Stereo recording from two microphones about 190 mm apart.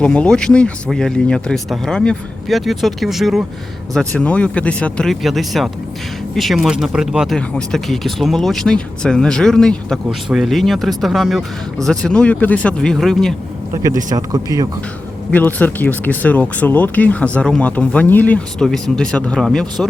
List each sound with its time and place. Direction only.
0.0 s speech: 5° left (ahead or behind)
13.8 s speech: 20° right (ahead or behind)
15.3 s speech: 10° left (ahead or behind)